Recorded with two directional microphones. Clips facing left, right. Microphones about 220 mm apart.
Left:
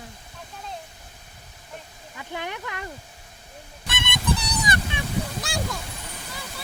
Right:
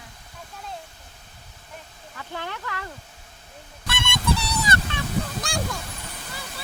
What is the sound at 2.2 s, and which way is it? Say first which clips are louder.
Speech: left 1 dB; 15° left (ahead or behind).